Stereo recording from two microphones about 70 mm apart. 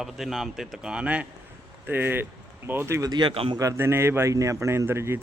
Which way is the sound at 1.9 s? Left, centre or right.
Right.